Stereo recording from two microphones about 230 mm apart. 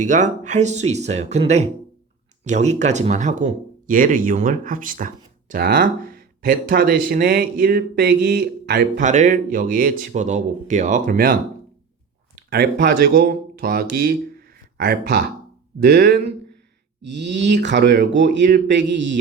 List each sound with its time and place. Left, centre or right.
0.0 s speech: right
12.5 s speech: right